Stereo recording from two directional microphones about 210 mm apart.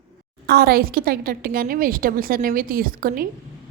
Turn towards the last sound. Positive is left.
turn(degrees=-40)  # may be behind; listen again after turning